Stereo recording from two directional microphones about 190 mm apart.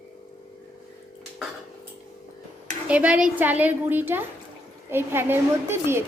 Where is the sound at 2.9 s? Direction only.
5° right (ahead or behind).